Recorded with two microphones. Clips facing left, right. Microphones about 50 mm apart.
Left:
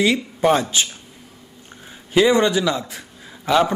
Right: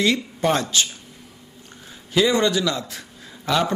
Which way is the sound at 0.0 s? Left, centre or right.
Centre.